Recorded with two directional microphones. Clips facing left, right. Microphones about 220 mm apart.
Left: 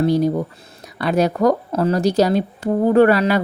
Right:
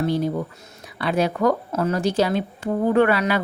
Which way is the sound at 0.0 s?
40° left (ahead or behind).